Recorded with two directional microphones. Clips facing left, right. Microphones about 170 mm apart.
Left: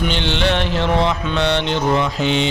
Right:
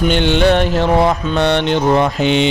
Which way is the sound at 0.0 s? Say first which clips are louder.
Right 7 dB; 50° right (ahead or behind).